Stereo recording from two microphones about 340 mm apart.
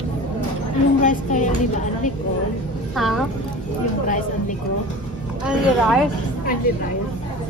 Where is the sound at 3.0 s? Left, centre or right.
Centre.